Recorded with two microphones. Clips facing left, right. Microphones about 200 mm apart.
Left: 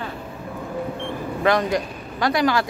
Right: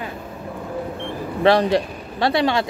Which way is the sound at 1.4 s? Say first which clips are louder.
Right 4 dB; 30° right (ahead or behind).